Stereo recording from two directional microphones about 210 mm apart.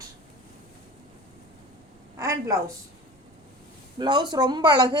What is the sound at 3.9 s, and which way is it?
A woman's voice, 20° right (ahead or behind).